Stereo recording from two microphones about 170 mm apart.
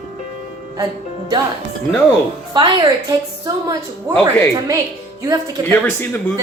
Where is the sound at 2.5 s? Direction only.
25° right (ahead or behind).